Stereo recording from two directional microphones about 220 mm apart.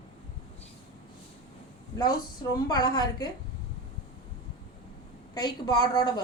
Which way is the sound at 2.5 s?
20° left (ahead or behind).